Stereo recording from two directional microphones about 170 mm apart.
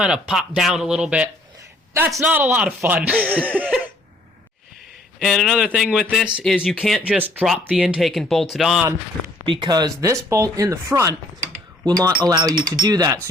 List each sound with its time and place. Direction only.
0.0 s speech: 5° right (ahead or behind)
1.9 s a man's voice: 15° right (ahead or behind)
3.6 s cough: 10° right (ahead or behind)
5.2 s speech: centre (ahead or behind)
9.5 s speech: 25° right (ahead or behind)
12.2 s speech: 20° right (ahead or behind)